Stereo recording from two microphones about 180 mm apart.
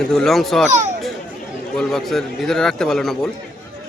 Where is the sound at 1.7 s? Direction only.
Centre (ahead or behind).